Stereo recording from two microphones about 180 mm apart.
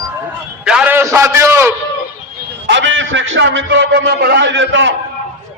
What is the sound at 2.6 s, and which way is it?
A man's voice, 85° right.